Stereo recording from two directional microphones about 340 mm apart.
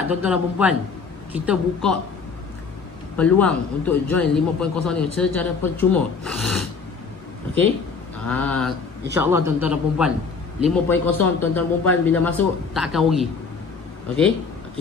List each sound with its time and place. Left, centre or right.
0.1 s a man's voice: centre
3.2 s a man's voice: centre
8.3 s a man's voice: centre